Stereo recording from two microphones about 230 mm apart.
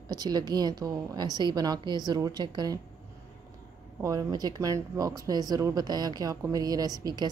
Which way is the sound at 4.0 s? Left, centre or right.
Centre.